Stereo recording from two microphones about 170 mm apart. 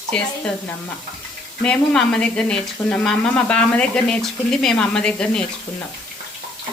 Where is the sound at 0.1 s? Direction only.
5° left (ahead or behind).